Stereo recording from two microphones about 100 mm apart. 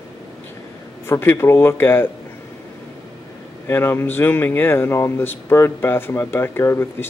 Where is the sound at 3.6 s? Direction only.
25° left (ahead or behind).